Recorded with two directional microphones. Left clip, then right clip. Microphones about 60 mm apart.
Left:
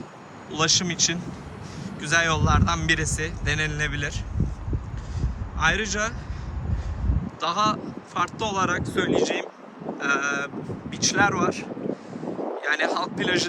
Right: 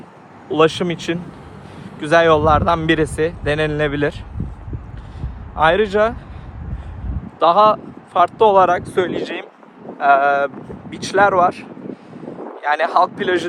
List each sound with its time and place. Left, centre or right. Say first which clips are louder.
0.5 s a man's voice: right 8 dB; right
2.0 s a man's voice: right 10 dB; right
3.0 s speech: right 11 dB; right
3.4 s a man's voice: right 5 dB; right
4.4 s heart sounds: left 1 dB; left
5.2 s speech: right 8 dB; right
7.3 s speech: right 12 dB; right
9.0 s speech: left 1 dB; right
10.0 s speech: right 12 dB; right
10.9 s speech: right 8 dB; right
13.1 s speech: right 5 dB; right